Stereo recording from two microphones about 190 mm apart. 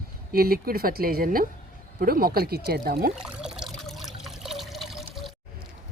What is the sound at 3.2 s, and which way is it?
Trickle, 5° right (ahead or behind).